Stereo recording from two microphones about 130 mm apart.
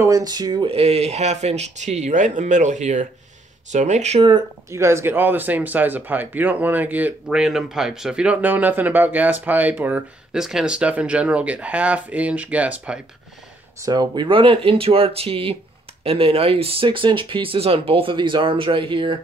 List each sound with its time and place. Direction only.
0.0 s speech: 30° right (ahead or behind)
0.7 s speech: 55° right (ahead or behind)
4.6 s speech: 20° right (ahead or behind)
13.8 s speech: 35° right (ahead or behind)